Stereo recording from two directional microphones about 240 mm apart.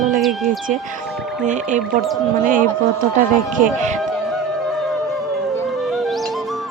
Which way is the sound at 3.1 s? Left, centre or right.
Right.